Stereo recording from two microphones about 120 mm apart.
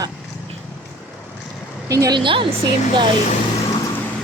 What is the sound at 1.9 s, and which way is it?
Speech, 30° right (ahead or behind).